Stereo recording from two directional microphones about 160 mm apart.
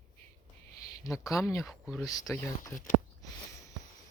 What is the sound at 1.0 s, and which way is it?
Speech, 20° left (ahead or behind).